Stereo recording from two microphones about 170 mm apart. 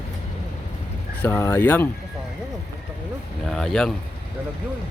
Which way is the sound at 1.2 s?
15° left (ahead or behind).